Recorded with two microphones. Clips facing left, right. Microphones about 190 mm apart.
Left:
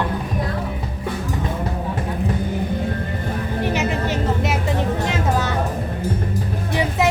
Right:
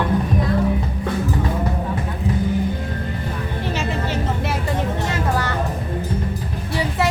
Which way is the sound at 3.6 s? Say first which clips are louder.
Left 3 dB; 15° left (ahead or behind).